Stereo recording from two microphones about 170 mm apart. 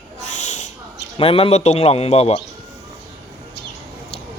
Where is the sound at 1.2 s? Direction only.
35° left (ahead or behind).